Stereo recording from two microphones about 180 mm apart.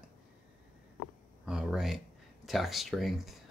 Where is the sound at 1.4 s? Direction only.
5° right (ahead or behind).